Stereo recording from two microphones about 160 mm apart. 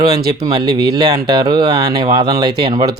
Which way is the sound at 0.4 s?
25° right (ahead or behind).